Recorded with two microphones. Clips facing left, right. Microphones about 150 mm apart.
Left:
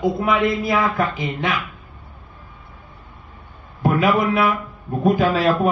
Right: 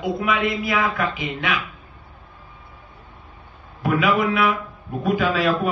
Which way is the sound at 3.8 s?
35° left (ahead or behind).